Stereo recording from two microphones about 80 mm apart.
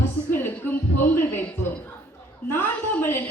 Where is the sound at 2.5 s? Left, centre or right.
Left.